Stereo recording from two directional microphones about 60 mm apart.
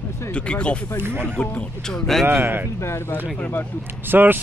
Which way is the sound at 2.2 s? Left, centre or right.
Right.